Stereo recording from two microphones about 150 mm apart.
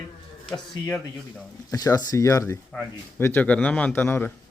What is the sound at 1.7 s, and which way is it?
A man's voice, 25° left (ahead or behind).